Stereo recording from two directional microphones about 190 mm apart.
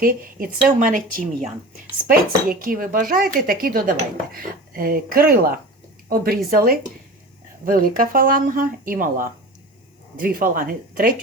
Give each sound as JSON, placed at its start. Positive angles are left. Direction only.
{"t": 0.0, "sound": "speech", "side_deg": -50}